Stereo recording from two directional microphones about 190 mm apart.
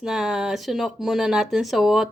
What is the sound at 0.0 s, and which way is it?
Speech, 5° right (ahead or behind).